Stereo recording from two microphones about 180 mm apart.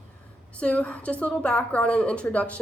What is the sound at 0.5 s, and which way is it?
Speech, 5° left (ahead or behind).